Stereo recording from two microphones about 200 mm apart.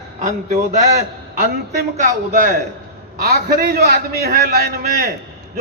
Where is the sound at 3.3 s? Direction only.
50° right (ahead or behind).